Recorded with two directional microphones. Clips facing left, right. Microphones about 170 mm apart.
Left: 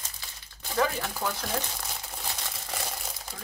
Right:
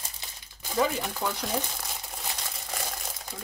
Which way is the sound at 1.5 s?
5° right (ahead or behind).